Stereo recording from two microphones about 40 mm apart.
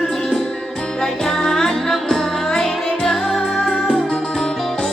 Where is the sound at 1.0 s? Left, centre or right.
Centre.